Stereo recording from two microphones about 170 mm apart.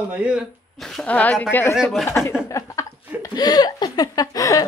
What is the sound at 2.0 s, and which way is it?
Speech, 15° left (ahead or behind).